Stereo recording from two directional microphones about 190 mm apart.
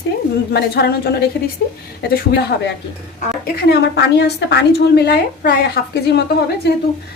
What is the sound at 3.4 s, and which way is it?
A woman's voice, 55° left (ahead or behind).